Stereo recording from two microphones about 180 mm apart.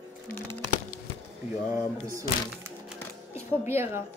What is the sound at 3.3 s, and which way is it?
Speech, 15° right (ahead or behind).